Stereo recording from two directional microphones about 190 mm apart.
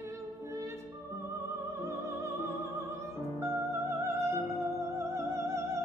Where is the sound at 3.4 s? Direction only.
15° right (ahead or behind).